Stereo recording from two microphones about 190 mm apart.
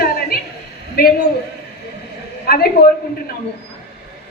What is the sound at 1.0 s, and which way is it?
Speech, 55° left (ahead or behind).